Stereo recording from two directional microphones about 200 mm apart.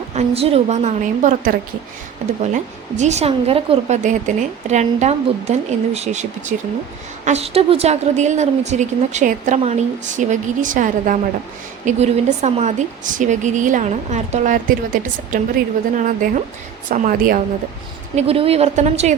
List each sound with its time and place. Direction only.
0.1 s a woman's voice: 30° right (ahead or behind)
18.1 s a woman's voice: 30° right (ahead or behind)